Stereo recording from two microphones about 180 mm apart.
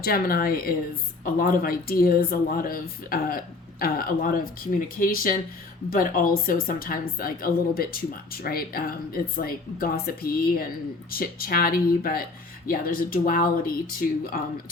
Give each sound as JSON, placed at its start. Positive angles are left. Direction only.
{"t": 0.0, "sound": "a woman's voice", "side_deg": 55}